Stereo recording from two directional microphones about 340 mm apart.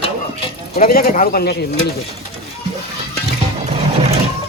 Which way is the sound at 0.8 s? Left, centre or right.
Left.